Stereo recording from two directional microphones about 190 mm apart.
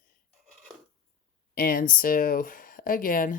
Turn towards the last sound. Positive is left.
turn(degrees=50)  # may be behind; listen again after turning